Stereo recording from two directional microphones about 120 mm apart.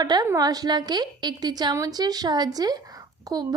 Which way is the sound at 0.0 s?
35° right (ahead or behind).